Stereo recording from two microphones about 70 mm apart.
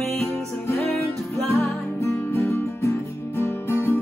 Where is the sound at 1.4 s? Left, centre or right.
Left.